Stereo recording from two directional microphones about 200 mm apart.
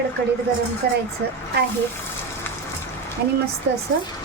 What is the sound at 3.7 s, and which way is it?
Speech, 65° right (ahead or behind).